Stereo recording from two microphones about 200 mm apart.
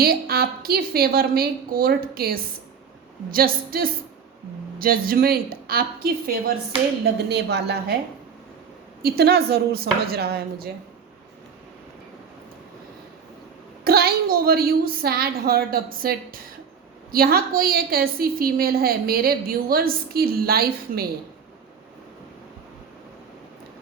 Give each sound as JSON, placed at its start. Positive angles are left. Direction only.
{"t": 0.0, "sound": "a woman's voice", "side_deg": -50}
{"t": 9.0, "sound": "a woman's voice", "side_deg": -50}
{"t": 13.8, "sound": "a woman's voice", "side_deg": -50}